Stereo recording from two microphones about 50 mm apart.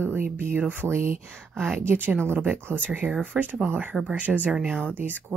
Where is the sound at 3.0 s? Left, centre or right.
Centre.